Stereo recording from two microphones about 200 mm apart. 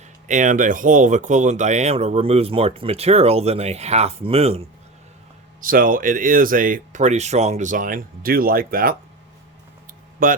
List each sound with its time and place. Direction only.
0.3 s speech: 40° right (ahead or behind)
5.6 s speech: 45° right (ahead or behind)
10.2 s speech: 45° right (ahead or behind)